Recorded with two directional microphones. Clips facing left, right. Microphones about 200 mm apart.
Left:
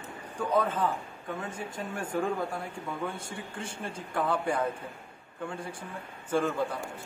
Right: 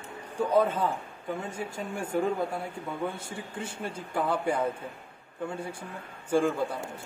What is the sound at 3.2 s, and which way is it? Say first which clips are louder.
Speech: right 2 dB; 10° right (ahead or behind).